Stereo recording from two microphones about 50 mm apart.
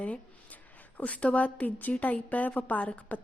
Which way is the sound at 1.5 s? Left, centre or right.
Left.